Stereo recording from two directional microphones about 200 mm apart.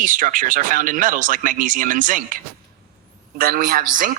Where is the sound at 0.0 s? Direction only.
40° right (ahead or behind).